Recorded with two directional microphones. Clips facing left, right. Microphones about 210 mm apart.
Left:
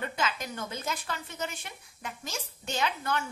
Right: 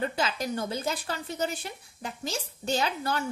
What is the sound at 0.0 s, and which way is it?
A woman's voice, 35° right (ahead or behind).